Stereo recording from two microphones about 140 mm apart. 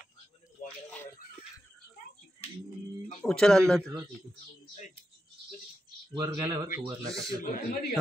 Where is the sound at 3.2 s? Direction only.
5° left (ahead or behind).